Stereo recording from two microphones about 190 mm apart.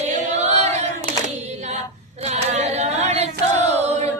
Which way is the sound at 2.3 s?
35° right (ahead or behind).